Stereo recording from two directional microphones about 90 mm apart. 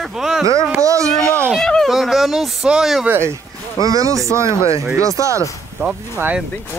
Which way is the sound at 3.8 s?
40° right (ahead or behind).